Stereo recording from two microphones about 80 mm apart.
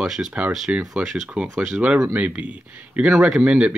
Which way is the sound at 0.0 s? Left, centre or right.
Centre.